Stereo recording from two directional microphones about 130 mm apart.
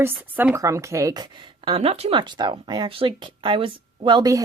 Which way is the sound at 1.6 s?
45° right (ahead or behind).